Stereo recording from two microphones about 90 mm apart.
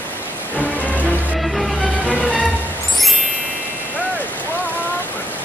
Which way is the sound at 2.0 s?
15° left (ahead or behind).